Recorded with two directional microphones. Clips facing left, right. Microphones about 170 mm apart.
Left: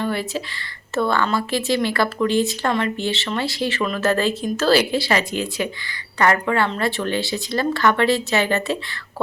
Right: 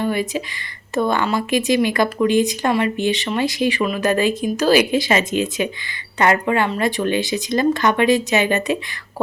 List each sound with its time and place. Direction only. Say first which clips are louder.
0.0 s speech: right 3 dB; 15° right (ahead or behind)